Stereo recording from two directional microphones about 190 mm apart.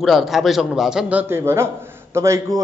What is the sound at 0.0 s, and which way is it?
A man's voice, centre (ahead or behind).